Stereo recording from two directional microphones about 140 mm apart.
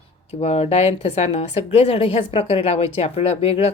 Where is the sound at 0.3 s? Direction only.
45° left (ahead or behind).